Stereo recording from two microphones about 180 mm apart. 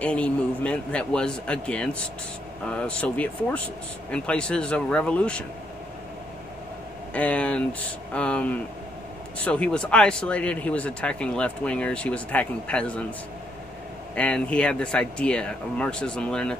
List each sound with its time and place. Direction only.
0.0 s speech: 5° left (ahead or behind)
7.2 s speech: 5° left (ahead or behind)
14.1 s speech: 5° left (ahead or behind)